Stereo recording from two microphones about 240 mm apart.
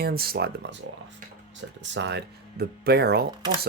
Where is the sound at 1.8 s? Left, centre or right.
Right.